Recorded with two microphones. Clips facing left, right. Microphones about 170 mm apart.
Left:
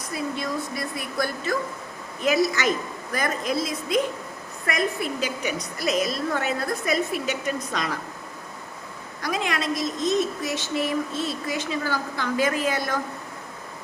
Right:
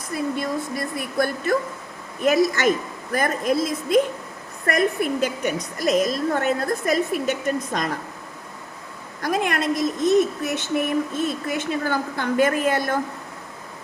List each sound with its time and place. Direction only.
0.1 s a woman's voice: 50° right (ahead or behind)
2.6 s a woman's voice: 50° right (ahead or behind)
9.2 s speech: 50° right (ahead or behind)